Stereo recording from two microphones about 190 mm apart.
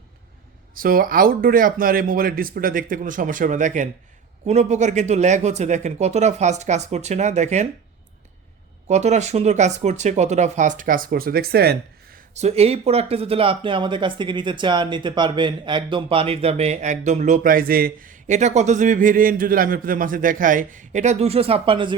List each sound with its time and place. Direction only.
0.7 s speech: 50° right (ahead or behind)
8.9 s speech: 35° right (ahead or behind); by 12.2 s 55° right (ahead or behind)
12.3 s speech: 35° right (ahead or behind)